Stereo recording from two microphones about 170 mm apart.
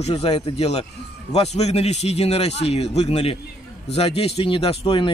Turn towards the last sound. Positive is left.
turn(degrees=35)  # may be behind; listen again after turning